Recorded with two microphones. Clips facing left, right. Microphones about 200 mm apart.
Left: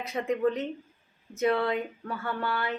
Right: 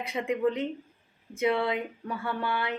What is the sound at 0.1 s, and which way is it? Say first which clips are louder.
A woman's voice: left 1 dB; 15° right (ahead or behind).